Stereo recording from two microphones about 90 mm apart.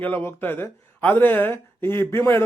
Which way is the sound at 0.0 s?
20° left (ahead or behind).